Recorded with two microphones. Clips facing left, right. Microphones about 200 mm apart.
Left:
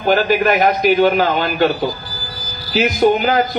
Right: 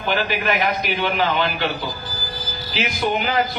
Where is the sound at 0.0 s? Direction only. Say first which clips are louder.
Left 8 dB; 45° left (ahead or behind).